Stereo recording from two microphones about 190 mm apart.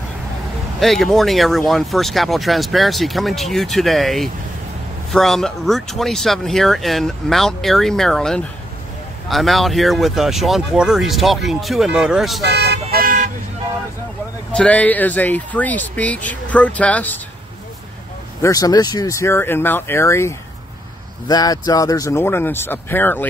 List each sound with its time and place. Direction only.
0.7 s speech: centre (ahead or behind)
12.4 s vehicle: 60° right (ahead or behind)
12.9 s vehicle: 45° right (ahead or behind)
14.5 s speech: 5° left (ahead or behind)
18.4 s speech: 20° left (ahead or behind)